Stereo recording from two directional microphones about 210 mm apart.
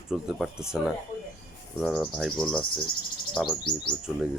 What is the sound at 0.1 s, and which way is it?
Speech, 5° right (ahead or behind).